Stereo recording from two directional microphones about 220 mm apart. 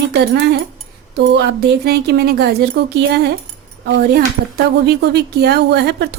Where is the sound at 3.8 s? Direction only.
45° right (ahead or behind).